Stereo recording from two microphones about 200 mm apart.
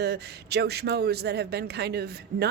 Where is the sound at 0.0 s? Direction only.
55° right (ahead or behind).